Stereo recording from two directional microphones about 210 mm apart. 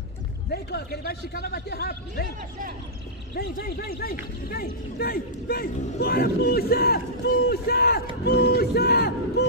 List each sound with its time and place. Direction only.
0.5 s speech: 50° left (ahead or behind)
3.3 s speech: 45° left (ahead or behind)